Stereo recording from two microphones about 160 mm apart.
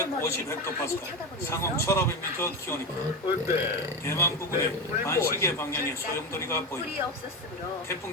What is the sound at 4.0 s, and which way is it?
Speech, 15° left (ahead or behind).